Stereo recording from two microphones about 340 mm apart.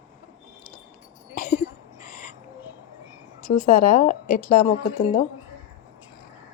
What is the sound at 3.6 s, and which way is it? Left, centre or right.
Speech, left.